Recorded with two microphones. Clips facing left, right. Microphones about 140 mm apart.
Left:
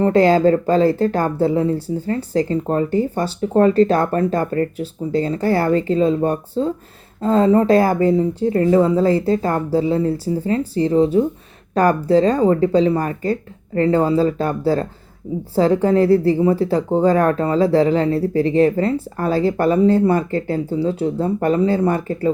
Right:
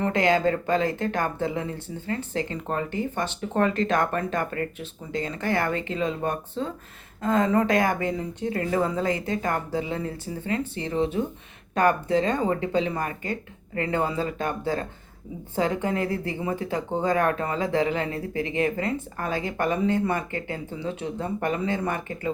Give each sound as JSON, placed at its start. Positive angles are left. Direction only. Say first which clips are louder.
{"t": 0.0, "sound": "speech", "louder": "left 9 dB", "side_deg": 35}